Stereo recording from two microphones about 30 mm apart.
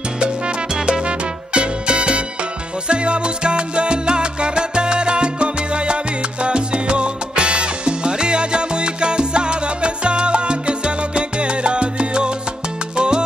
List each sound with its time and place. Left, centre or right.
0.2 s music: right
0.7 s music: right
1.0 s music: right
2.9 s salsa music: right
12.9 s music: right